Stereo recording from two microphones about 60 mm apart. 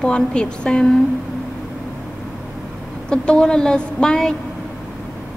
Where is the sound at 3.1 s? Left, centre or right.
Centre.